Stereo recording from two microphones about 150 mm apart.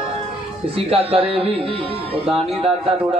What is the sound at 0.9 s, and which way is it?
Speech, 40° right (ahead or behind).